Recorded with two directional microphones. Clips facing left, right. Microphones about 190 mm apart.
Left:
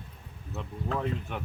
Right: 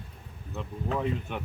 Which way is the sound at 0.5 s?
5° right (ahead or behind).